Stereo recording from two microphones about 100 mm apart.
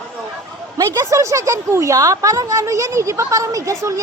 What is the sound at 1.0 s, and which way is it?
A woman's voice, 30° right (ahead or behind).